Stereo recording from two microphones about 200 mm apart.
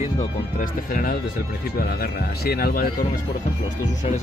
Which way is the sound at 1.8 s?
50° left (ahead or behind).